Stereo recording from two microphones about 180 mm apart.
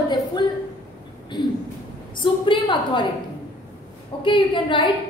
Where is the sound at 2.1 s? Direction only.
30° left (ahead or behind).